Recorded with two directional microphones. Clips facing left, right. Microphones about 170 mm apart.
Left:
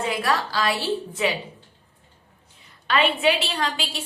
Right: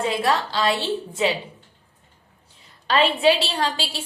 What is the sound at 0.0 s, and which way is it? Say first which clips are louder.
A woman's voice: right 2 dB; 25° right (ahead or behind).